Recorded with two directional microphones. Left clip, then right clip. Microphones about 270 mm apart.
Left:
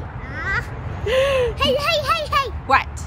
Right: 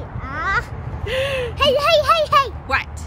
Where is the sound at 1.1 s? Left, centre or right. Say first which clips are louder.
Left 4 dB; centre.